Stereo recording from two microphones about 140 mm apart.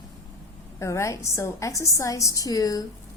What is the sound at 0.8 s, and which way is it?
A woman's voice, 20° left (ahead or behind).